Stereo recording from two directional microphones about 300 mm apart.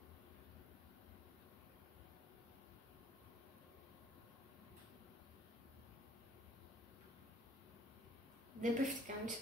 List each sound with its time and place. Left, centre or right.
8.5 s a woman's voice: right